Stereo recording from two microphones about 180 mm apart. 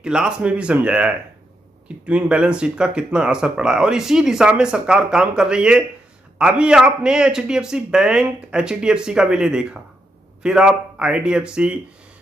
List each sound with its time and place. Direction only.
0.0 s speech: 5° right (ahead or behind)